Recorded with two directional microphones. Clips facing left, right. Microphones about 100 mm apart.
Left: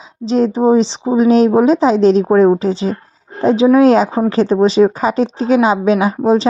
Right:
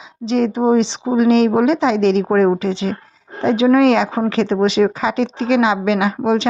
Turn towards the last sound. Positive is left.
turn(degrees=35)  # may be behind; listen again after turning